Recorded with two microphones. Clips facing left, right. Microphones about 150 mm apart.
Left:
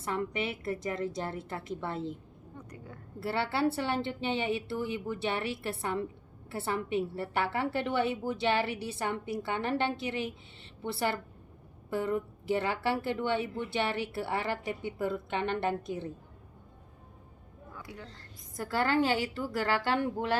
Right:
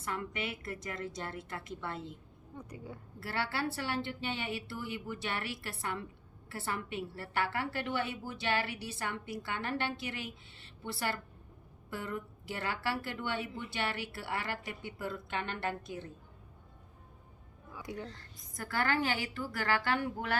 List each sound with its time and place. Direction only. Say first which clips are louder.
0.0 s a woman's voice: left 5 dB; 30° left (ahead or behind)
2.6 s speech: right 2 dB; 10° right (ahead or behind)
3.2 s a woman's voice: left 6 dB; 20° left (ahead or behind)
11.9 s a woman's voice: left 9 dB; 25° left (ahead or behind)
17.8 s speech: right 7 dB; 20° right (ahead or behind)
18.5 s a woman's voice: left 5 dB; 25° left (ahead or behind)